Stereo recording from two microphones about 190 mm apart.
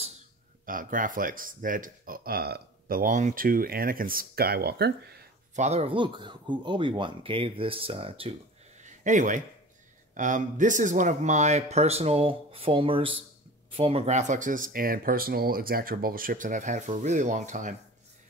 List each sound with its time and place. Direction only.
0.7 s speech: 45° right (ahead or behind)
5.6 s speech: 35° right (ahead or behind)
8.8 s a sound: 40° right (ahead or behind)
10.1 s a man's voice: 40° right (ahead or behind)